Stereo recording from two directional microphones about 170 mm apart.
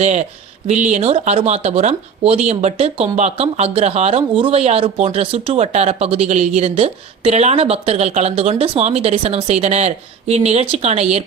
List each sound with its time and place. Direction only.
0.0 s a woman's voice: 40° right (ahead or behind)